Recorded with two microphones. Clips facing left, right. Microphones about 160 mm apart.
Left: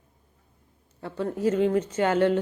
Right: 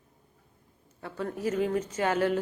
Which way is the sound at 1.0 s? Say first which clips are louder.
Left 5 dB; 30° left (ahead or behind).